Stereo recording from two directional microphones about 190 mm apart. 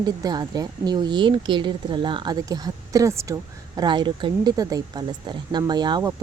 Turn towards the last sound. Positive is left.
turn(degrees=-25)  # may be behind; listen again after turning